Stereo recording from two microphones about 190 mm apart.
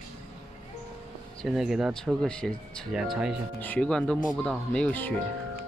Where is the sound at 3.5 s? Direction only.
10° left (ahead or behind).